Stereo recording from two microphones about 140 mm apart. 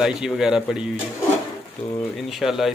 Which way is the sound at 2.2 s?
Centre (ahead or behind).